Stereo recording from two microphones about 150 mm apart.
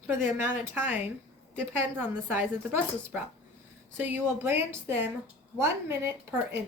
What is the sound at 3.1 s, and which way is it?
A woman's voice, 5° right (ahead or behind).